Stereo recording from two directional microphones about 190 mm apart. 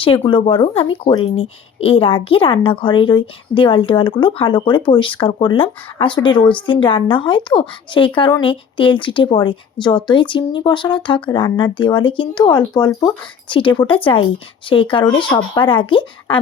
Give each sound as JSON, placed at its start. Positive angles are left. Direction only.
{"t": 0.0, "sound": "a woman's voice", "side_deg": 25}